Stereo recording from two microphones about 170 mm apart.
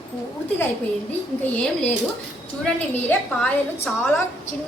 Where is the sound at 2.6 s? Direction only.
5° left (ahead or behind).